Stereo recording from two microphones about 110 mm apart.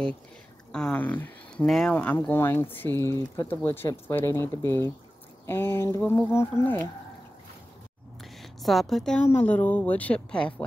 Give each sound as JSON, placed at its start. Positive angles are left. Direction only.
{"t": 0.7, "sound": "speech", "side_deg": 5}
{"t": 1.7, "sound": "speech", "side_deg": 5}
{"t": 2.0, "sound": "speech", "side_deg": 15}
{"t": 8.2, "sound": "a sound", "side_deg": 0}
{"t": 9.3, "sound": "speech", "side_deg": 15}